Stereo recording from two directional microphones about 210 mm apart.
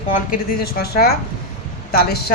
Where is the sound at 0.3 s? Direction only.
45° left (ahead or behind).